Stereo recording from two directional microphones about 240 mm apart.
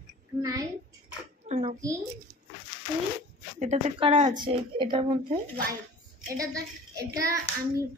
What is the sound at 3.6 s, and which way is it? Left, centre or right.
Speech, right.